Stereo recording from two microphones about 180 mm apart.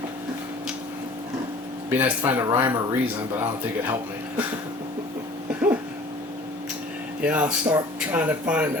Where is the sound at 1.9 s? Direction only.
10° right (ahead or behind).